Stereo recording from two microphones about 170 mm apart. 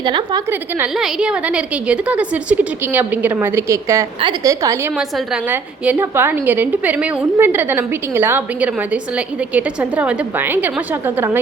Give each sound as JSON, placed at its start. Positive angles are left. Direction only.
{"t": 0.0, "sound": "a woman's voice", "side_deg": -25}
{"t": 0.5, "sound": "a woman's voice", "side_deg": -5}
{"t": 4.9, "sound": "a woman's voice", "side_deg": -5}